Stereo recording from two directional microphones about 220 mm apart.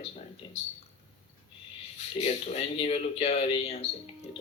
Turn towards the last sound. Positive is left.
turn(degrees=30)  # may be behind; listen again after turning